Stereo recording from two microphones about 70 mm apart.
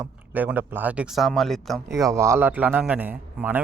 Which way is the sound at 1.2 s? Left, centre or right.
Centre.